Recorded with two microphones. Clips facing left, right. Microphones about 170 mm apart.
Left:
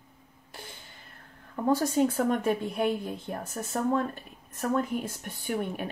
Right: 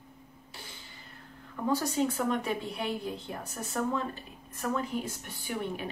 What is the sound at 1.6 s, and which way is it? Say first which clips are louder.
Speech: left 4 dB; 50° left (ahead or behind).